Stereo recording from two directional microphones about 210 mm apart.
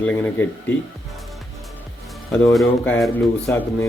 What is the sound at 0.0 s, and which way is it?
Speech, 5° left (ahead or behind).